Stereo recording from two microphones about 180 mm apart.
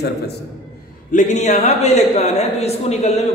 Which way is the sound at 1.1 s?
40° left (ahead or behind).